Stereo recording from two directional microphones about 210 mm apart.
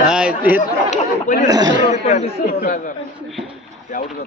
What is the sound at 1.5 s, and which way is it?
Speech, 15° right (ahead or behind).